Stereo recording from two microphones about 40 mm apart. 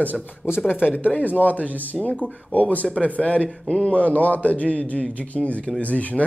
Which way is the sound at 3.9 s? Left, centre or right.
Left.